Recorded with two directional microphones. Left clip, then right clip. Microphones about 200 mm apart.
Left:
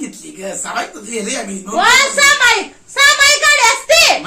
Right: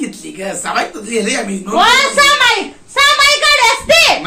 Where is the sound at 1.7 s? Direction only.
Centre (ahead or behind).